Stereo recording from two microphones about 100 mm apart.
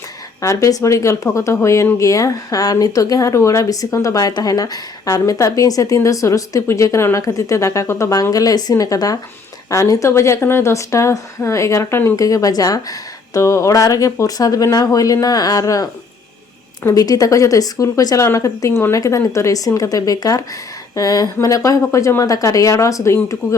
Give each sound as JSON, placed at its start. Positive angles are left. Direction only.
{"t": 0.4, "sound": "speech", "side_deg": 30}